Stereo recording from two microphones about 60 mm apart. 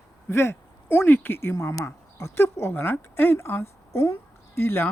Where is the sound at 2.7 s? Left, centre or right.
Left.